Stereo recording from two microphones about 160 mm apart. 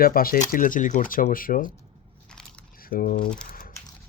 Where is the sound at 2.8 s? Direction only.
60° left (ahead or behind).